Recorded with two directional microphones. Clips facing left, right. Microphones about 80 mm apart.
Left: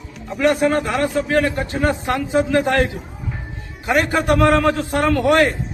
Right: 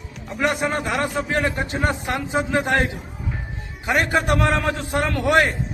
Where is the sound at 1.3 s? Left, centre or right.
Centre.